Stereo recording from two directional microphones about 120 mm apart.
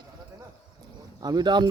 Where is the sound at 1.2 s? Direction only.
35° right (ahead or behind).